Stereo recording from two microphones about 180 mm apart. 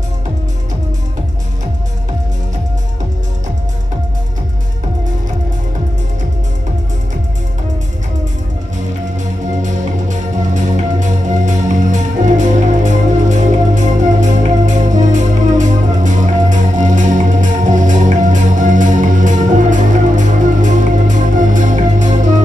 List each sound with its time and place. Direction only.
9.6 s music: 45° right (ahead or behind)